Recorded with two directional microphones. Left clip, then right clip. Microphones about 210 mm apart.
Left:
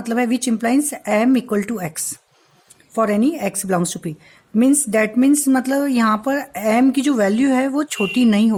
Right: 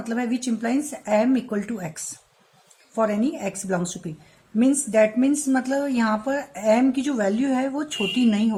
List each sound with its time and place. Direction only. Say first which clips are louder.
0.0 s speech: left 7 dB; 55° left (ahead or behind)